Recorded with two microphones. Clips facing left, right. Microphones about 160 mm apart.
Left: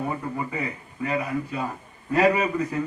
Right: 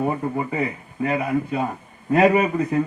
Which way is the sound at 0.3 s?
25° right (ahead or behind).